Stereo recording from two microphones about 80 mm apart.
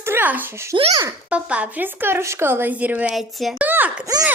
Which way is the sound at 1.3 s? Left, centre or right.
Centre.